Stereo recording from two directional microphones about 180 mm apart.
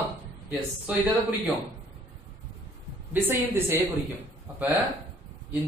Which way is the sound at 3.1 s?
10° right (ahead or behind).